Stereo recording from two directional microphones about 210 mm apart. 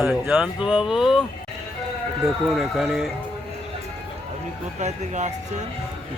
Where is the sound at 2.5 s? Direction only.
Centre (ahead or behind).